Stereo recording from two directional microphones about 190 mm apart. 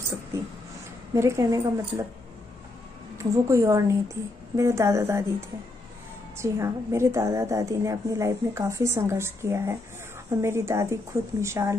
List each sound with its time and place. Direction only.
1.1 s a woman's voice: 15° right (ahead or behind)
3.2 s a woman's voice: 15° right (ahead or behind)
6.3 s a woman's voice: 15° right (ahead or behind)